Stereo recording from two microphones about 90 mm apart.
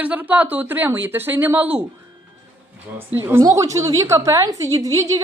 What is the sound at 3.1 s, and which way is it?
Speech, 25° right (ahead or behind).